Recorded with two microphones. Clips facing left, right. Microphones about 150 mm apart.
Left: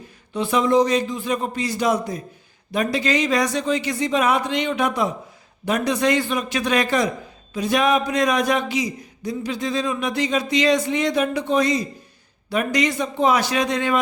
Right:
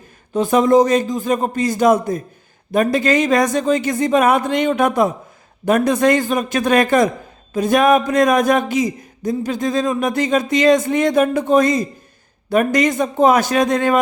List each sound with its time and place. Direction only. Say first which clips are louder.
0.3 s speech: right 5 dB; 45° right (ahead or behind)